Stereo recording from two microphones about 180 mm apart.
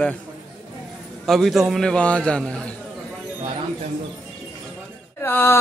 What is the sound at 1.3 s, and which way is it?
A man's voice, centre (ahead or behind).